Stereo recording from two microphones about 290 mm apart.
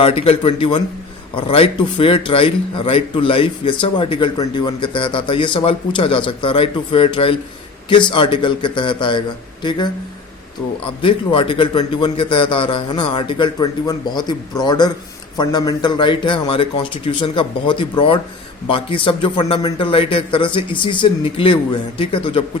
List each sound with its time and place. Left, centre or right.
0.0 s a man's voice: centre
11.0 s a man's voice: centre